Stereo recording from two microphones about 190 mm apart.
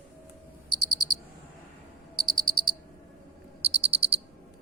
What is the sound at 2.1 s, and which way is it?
Cricket, 20° right (ahead or behind).